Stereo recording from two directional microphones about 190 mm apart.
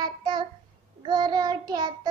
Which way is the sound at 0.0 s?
25° right (ahead or behind).